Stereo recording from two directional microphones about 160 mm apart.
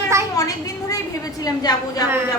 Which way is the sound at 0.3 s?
20° left (ahead or behind).